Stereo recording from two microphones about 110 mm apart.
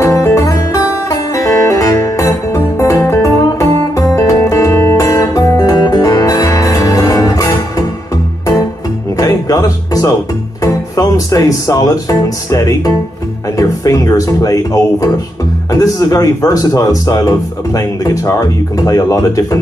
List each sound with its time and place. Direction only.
0.0 s music: 30° left (ahead or behind)
9.2 s music: 35° left (ahead or behind)
10.6 s speech: 35° left (ahead or behind)